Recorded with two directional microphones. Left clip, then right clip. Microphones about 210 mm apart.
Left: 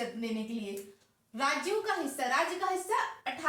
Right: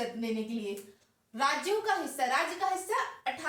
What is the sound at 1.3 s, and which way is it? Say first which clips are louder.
Speech: right 1 dB; 10° left (ahead or behind).